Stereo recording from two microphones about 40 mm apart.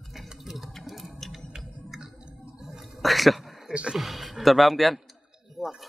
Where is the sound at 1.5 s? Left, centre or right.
Centre.